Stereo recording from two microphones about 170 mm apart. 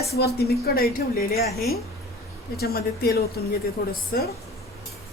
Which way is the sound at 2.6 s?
65° left (ahead or behind).